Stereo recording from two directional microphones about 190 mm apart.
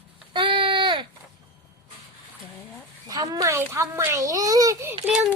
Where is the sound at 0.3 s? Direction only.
25° right (ahead or behind).